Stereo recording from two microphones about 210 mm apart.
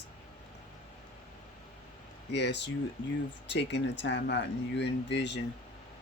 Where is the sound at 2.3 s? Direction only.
55° left (ahead or behind).